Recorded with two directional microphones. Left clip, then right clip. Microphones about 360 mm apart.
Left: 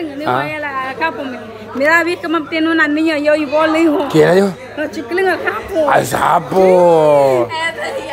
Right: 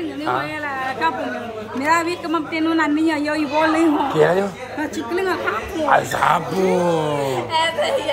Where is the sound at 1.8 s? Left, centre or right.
Centre.